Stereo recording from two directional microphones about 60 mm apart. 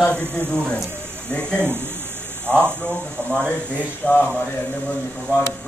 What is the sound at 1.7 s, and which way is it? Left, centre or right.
Speech, right.